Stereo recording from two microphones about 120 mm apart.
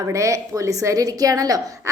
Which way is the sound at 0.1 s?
25° right (ahead or behind).